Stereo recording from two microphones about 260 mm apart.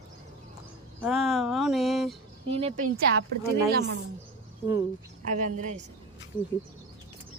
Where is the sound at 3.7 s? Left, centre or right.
Right.